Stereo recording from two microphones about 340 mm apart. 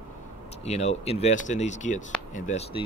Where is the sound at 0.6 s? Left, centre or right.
Centre.